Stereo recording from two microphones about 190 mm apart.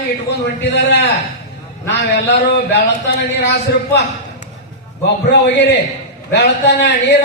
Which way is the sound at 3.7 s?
60° left (ahead or behind).